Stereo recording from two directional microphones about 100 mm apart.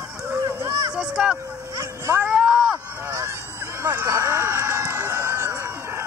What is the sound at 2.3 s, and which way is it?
Run, 10° right (ahead or behind).